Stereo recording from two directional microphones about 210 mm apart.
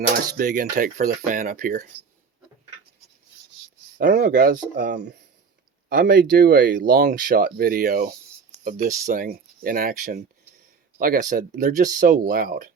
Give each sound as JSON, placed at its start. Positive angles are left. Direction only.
{"t": 0.3, "sound": "speech", "side_deg": -45}
{"t": 3.9, "sound": "speech", "side_deg": -50}